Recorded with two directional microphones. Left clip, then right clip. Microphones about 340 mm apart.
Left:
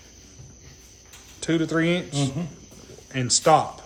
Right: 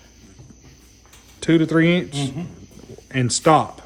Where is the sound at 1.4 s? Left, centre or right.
Centre.